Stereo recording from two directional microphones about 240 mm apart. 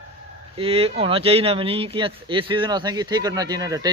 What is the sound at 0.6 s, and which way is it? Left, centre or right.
Speech, right.